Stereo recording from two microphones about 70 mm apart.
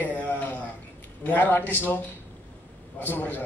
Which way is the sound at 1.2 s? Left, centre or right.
Left.